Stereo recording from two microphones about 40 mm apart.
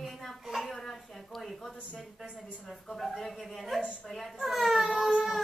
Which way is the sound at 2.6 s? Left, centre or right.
Centre.